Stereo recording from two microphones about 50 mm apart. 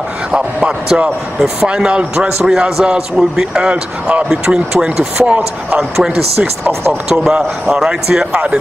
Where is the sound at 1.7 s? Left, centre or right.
Right.